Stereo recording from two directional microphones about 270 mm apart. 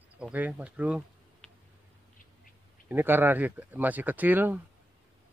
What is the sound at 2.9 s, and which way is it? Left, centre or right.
Speech, centre.